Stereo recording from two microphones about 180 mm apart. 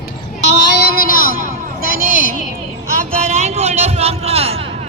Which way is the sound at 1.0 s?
50° left (ahead or behind).